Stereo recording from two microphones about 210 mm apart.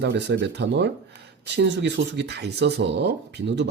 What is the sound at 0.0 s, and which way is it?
Speech, 55° right (ahead or behind).